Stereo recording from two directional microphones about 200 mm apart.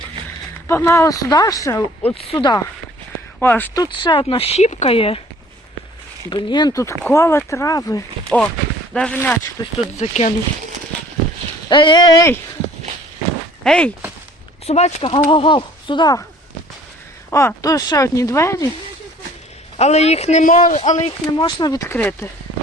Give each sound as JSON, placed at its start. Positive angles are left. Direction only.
{"t": 0.7, "sound": "speech", "side_deg": 15}
{"t": 2.1, "sound": "speech", "side_deg": 25}
{"t": 3.4, "sound": "speech", "side_deg": 10}
{"t": 3.8, "sound": "speech", "side_deg": 25}
{"t": 6.3, "sound": "speech", "side_deg": 20}
{"t": 8.3, "sound": "speech", "side_deg": 5}
{"t": 10.0, "sound": "speech", "side_deg": 35}
{"t": 11.7, "sound": "speech", "side_deg": 25}
{"t": 13.7, "sound": "speech", "side_deg": 5}
{"t": 14.7, "sound": "speech", "side_deg": 35}
{"t": 17.3, "sound": "speech", "side_deg": 15}
{"t": 19.7, "sound": "speech", "side_deg": 35}
{"t": 21.3, "sound": "speech", "side_deg": 20}